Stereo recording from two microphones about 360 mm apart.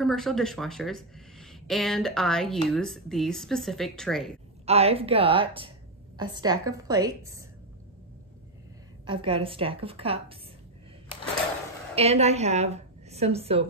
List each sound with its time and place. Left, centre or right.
0.0 s speech: centre
4.6 s a woman's voice: centre
9.0 s a woman's voice: centre
11.9 s a woman's voice: centre